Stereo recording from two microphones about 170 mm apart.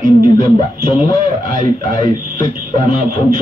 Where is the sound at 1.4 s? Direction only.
50° right (ahead or behind).